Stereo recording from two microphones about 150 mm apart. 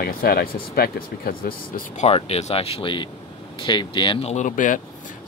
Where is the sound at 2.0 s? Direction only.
45° left (ahead or behind).